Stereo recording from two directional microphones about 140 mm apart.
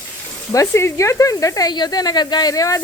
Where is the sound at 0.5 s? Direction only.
20° left (ahead or behind).